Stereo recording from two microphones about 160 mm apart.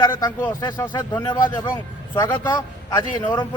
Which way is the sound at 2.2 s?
25° left (ahead or behind).